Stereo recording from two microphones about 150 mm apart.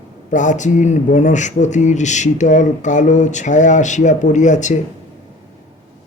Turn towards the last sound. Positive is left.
turn(degrees=55)  # may be behind; listen again after turning